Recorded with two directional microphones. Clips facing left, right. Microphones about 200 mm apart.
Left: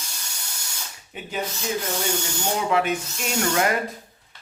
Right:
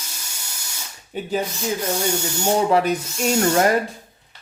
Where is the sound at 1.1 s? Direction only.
35° right (ahead or behind).